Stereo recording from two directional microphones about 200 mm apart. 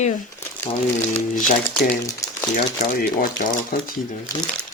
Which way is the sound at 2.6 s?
45° left (ahead or behind).